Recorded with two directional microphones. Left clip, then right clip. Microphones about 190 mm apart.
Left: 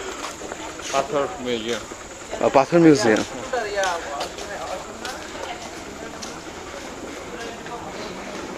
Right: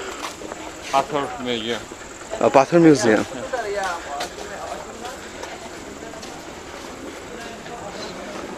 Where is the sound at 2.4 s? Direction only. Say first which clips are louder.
Right 1 dB; 15° right (ahead or behind).